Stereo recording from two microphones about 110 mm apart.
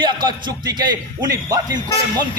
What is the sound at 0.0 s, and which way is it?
A man's voice, 45° right (ahead or behind).